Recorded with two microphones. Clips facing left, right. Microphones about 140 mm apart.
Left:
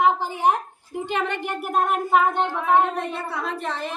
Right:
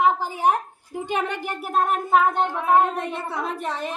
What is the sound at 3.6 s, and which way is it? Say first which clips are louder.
Speech: right 1 dB; 10° right (ahead or behind).